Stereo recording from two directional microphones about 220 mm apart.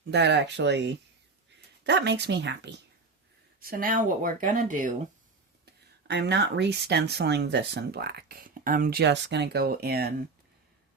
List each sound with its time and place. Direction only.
0.1 s speech: 50° right (ahead or behind)
3.6 s speech: 40° right (ahead or behind)
5.6 s speech: 50° right (ahead or behind)